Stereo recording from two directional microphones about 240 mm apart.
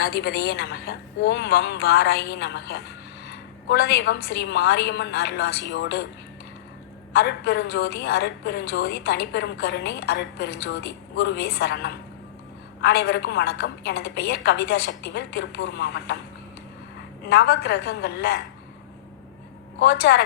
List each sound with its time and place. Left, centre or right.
0.1 s a woman's voice: left
7.1 s a woman's voice: left
17.2 s a woman's voice: left
19.8 s a woman's voice: left